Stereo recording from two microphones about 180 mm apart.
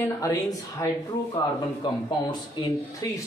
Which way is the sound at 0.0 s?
20° left (ahead or behind).